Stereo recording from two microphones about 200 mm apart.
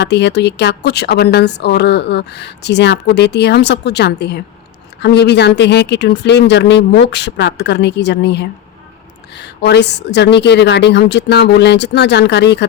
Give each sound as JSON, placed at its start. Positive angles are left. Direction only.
{"t": 0.0, "sound": "speech", "side_deg": 60}